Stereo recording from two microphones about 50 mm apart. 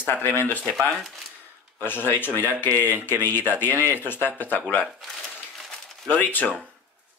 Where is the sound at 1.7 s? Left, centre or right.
Left.